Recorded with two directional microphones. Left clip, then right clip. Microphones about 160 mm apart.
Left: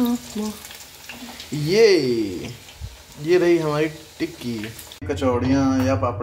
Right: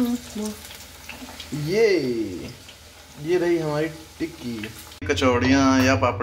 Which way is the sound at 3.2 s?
15° left (ahead or behind).